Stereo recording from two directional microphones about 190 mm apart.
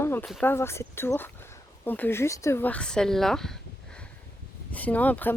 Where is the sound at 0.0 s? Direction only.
10° left (ahead or behind).